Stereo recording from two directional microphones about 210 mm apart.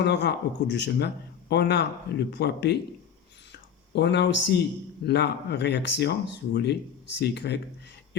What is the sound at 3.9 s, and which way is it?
Speech, 55° left (ahead or behind).